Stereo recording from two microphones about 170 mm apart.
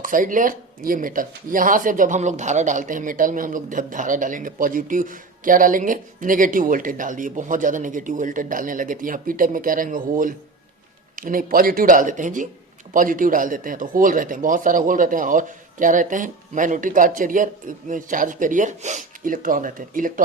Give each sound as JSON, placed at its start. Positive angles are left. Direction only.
{"t": 0.0, "sound": "speech", "side_deg": -50}